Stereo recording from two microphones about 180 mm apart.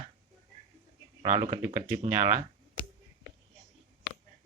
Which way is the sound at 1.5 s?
15° right (ahead or behind).